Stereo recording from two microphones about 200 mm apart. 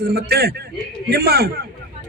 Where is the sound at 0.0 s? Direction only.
50° right (ahead or behind).